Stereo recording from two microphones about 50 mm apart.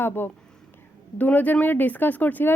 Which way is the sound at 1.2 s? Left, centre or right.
Left.